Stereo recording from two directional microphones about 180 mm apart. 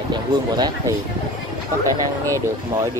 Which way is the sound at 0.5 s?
25° right (ahead or behind).